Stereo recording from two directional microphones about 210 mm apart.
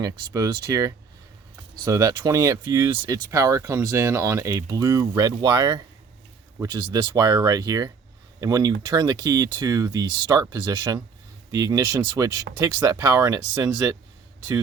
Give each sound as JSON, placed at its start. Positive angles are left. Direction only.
{"t": 0.0, "sound": "speech", "side_deg": -15}